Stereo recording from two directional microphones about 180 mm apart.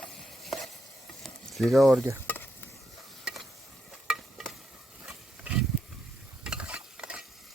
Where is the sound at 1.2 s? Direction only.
Centre (ahead or behind).